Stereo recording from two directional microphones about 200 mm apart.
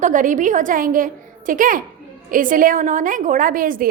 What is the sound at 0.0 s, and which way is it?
A woman's voice, 40° right (ahead or behind).